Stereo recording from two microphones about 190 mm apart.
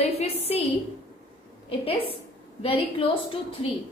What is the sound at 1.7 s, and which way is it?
A woman's voice, 30° left (ahead or behind).